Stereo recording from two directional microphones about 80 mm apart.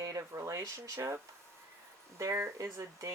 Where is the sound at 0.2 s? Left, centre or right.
Right.